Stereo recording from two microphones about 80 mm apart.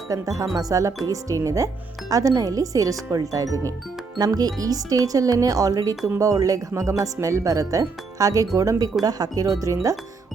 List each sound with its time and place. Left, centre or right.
0.1 s speech: right